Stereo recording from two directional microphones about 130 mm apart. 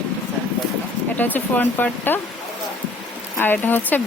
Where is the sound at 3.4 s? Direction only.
15° left (ahead or behind).